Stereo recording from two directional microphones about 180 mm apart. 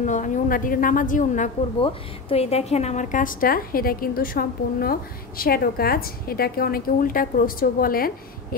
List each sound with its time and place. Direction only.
0.0 s a woman's voice: 45° left (ahead or behind)
1.8 s a woman's voice: 30° left (ahead or behind); by 8.1 s 55° left (ahead or behind)